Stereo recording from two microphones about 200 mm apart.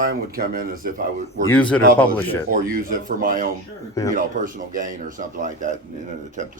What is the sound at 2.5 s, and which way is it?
Speech, 45° right (ahead or behind).